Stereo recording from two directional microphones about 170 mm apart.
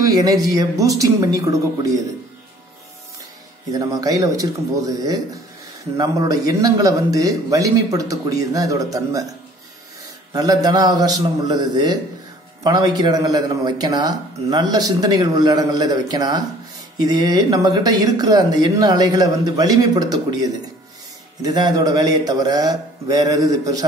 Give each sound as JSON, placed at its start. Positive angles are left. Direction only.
{"t": 0.0, "sound": "a man's voice", "side_deg": -20}
{"t": 3.7, "sound": "a man's voice", "side_deg": -20}
{"t": 10.3, "sound": "a man's voice", "side_deg": -20}